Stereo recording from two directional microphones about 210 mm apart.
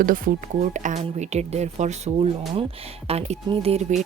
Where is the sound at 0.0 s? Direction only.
40° right (ahead or behind).